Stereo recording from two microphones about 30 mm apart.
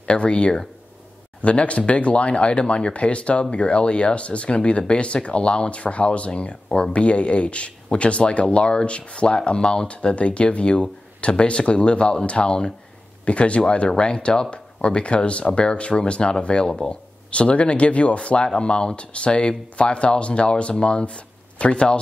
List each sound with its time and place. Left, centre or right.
0.0 s speech: left
10.1 s speech: left
16.6 s speech: left
17.3 s speech: left